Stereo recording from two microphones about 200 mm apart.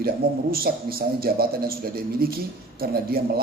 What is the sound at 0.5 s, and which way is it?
A man's voice, 50° right (ahead or behind).